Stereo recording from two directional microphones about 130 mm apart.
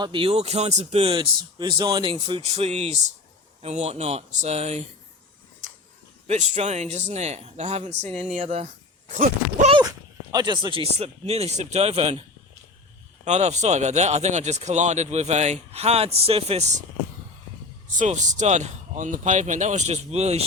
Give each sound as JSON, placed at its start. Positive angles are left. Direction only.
{"t": 0.0, "sound": "a man's voice", "side_deg": -40}
{"t": 6.2, "sound": "speech", "side_deg": -65}
{"t": 9.1, "sound": "speech", "side_deg": -70}
{"t": 10.3, "sound": "speech", "side_deg": -35}
{"t": 10.9, "sound": "a man's voice", "side_deg": -55}
{"t": 13.2, "sound": "speech", "side_deg": -60}
{"t": 17.9, "sound": "speech", "side_deg": -70}